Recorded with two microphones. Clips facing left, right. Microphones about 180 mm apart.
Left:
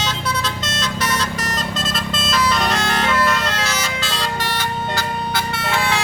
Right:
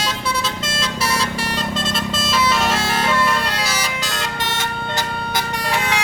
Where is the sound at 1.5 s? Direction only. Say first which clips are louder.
Right 2 dB; 5° right (ahead or behind).